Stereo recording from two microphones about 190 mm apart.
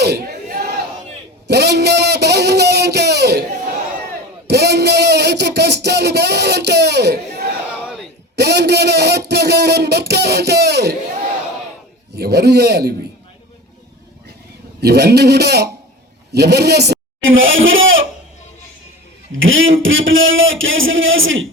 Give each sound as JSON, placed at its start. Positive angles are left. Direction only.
{"t": 0.0, "sound": "a sound", "side_deg": -55}
{"t": 1.5, "sound": "speech", "side_deg": -60}
{"t": 4.4, "sound": "a sound", "side_deg": -60}
{"t": 12.1, "sound": "a man's voice", "side_deg": -60}
{"t": 14.8, "sound": "a man's voice", "side_deg": -60}
{"t": 19.4, "sound": "a man's voice", "side_deg": -90}